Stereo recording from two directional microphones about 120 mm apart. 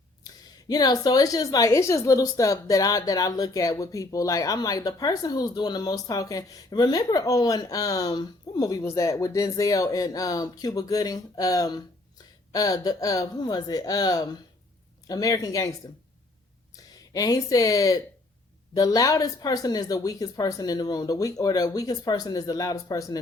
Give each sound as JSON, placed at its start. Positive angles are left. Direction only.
{"t": 0.3, "sound": "a woman's voice", "side_deg": 35}
{"t": 16.7, "sound": "a woman's voice", "side_deg": 30}